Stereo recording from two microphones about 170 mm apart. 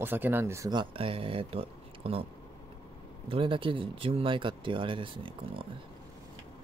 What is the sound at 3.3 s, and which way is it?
Speech, 30° right (ahead or behind).